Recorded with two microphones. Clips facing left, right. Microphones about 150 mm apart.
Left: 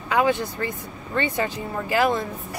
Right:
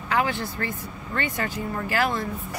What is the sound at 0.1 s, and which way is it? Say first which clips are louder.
Speech: left 4 dB; 20° left (ahead or behind).